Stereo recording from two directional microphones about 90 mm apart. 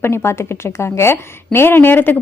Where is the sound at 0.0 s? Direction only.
30° left (ahead or behind).